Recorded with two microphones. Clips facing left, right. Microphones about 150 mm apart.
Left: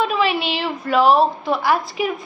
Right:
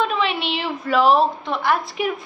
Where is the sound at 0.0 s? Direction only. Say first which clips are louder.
Left 2 dB; 5° left (ahead or behind).